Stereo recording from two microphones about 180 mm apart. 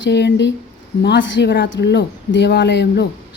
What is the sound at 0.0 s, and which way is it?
Speech, 75° left (ahead or behind).